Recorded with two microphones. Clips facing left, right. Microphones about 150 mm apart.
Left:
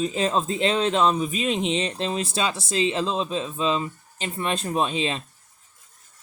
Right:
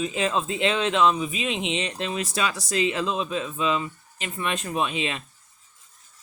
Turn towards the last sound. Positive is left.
turn(degrees=30)  # may be behind; listen again after turning